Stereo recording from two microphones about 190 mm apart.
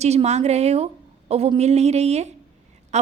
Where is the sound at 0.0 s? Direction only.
35° right (ahead or behind).